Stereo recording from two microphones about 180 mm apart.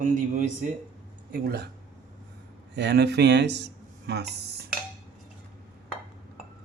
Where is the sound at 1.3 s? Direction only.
60° right (ahead or behind).